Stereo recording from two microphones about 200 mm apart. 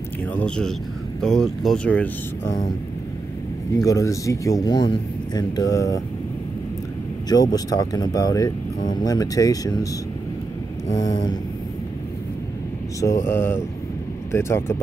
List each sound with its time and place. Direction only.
0.4 s speech: 5° left (ahead or behind)
3.8 s speech: 15° left (ahead or behind)
7.2 s speech: 20° left (ahead or behind)
10.9 s speech: 20° left (ahead or behind)
13.0 s speech: 15° left (ahead or behind)